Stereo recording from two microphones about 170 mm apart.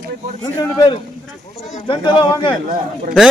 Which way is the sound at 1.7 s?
30° left (ahead or behind).